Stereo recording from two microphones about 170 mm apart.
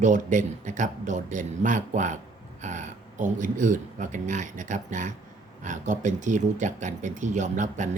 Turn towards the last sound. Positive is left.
turn(degrees=-45)  # may be behind; listen again after turning